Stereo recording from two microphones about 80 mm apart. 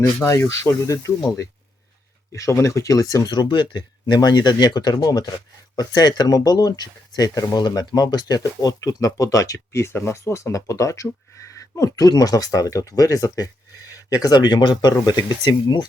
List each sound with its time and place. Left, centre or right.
0.2 s speech: left
2.3 s speech: left
3.2 s speech: left
4.0 s speech: left